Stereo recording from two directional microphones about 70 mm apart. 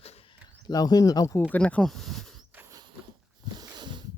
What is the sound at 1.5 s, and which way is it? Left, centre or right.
Speech, centre.